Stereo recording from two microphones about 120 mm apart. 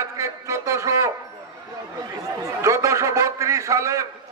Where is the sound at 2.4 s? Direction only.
25° right (ahead or behind).